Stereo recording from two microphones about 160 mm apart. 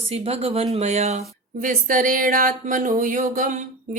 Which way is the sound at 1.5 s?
55° right (ahead or behind).